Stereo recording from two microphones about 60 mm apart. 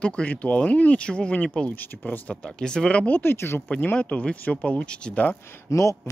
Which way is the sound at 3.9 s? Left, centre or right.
Left.